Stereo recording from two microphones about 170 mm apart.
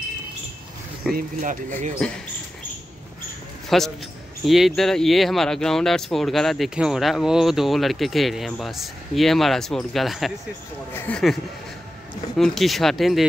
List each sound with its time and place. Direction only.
1.1 s speech: 50° right (ahead or behind)
3.6 s a man's voice: centre (ahead or behind)
10.9 s speech: 10° left (ahead or behind)
12.4 s speech: centre (ahead or behind)